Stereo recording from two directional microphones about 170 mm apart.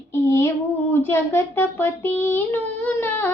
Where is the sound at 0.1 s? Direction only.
15° left (ahead or behind).